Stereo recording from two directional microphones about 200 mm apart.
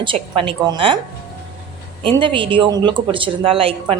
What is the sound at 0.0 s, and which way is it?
Speech, 25° right (ahead or behind).